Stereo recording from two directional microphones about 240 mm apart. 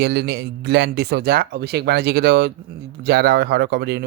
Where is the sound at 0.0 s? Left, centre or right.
Right.